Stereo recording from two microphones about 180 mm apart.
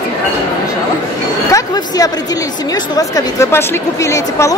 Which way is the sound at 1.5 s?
20° left (ahead or behind).